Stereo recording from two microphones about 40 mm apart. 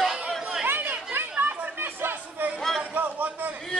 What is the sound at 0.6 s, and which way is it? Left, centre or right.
Chatter, right.